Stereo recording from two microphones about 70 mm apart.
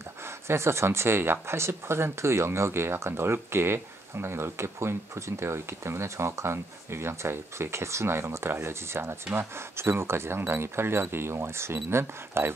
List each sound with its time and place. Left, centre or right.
0.5 s speech: right